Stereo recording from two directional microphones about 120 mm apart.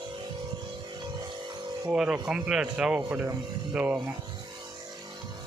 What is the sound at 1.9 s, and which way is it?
Speech, 10° right (ahead or behind).